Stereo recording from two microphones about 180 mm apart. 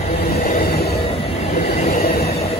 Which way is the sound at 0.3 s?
40° left (ahead or behind).